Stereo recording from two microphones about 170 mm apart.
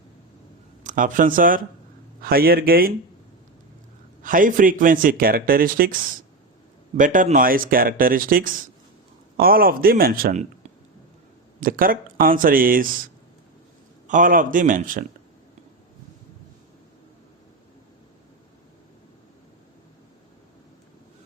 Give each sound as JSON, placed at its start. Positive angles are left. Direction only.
{"t": 0.9, "sound": "speech", "side_deg": -50}
{"t": 4.2, "sound": "speech", "side_deg": -50}
{"t": 11.6, "sound": "speech", "side_deg": -55}
{"t": 14.1, "sound": "speech", "side_deg": -50}